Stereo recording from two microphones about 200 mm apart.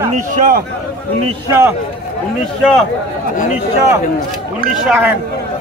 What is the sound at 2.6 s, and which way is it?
Speech, centre (ahead or behind).